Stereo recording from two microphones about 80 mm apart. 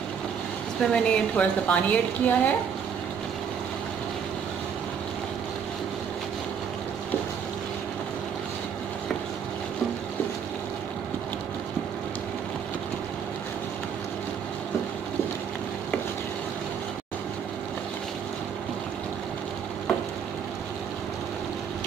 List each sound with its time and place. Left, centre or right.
0.7 s a woman's voice: centre